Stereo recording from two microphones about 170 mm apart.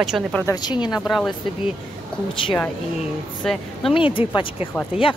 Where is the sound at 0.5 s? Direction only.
25° left (ahead or behind).